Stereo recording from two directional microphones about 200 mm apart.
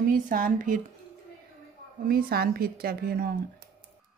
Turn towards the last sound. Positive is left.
turn(degrees=-50)  # may be behind; listen again after turning